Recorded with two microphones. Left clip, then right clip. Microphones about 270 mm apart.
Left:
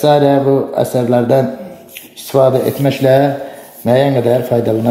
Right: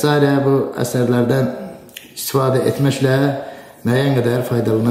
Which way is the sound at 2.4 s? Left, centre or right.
Centre.